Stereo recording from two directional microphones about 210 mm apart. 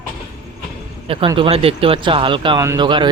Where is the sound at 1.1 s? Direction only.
25° right (ahead or behind).